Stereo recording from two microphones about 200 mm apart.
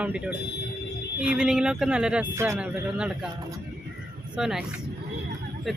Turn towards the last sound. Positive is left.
turn(degrees=0)  # may be behind; listen again after turning